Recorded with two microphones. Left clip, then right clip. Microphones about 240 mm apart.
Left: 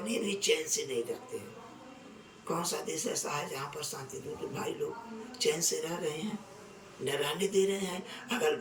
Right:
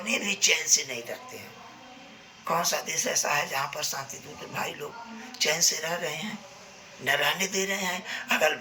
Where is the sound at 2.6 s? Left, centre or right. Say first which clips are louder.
Right 6 dB; centre.